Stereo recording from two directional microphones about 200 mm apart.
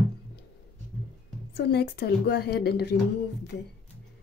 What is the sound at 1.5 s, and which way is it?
A woman's voice, 55° left (ahead or behind).